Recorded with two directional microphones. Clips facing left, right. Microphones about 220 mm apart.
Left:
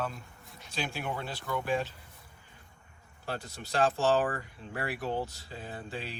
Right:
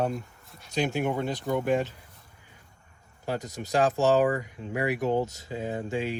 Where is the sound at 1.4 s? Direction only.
50° right (ahead or behind).